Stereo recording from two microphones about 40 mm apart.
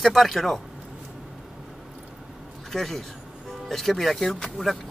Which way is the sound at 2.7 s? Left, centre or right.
Centre.